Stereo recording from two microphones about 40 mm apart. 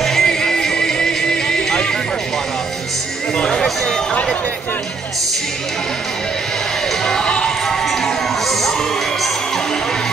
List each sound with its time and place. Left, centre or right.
0.0 s music: centre
4.1 s a sound: left
7.2 s music: left
7.6 s crowd: centre